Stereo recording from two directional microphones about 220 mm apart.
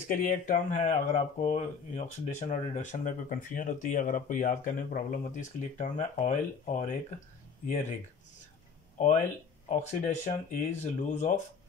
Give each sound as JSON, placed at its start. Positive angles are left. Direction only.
{"t": 0.1, "sound": "speech", "side_deg": 35}
{"t": 9.0, "sound": "speech", "side_deg": 35}